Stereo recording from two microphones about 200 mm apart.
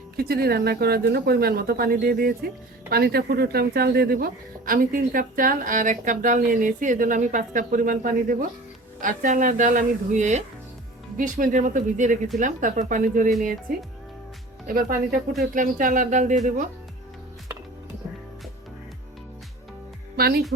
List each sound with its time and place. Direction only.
0.2 s speech: 50° right (ahead or behind)
14.7 s speech: 45° right (ahead or behind)
20.1 s speech: 50° right (ahead or behind)